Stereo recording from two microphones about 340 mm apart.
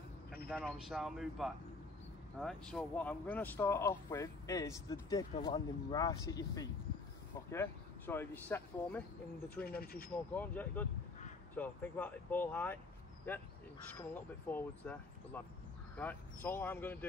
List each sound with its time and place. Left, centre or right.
0.5 s speech: centre
9.7 s speech: left
10.3 s speech: centre
13.9 s speech: centre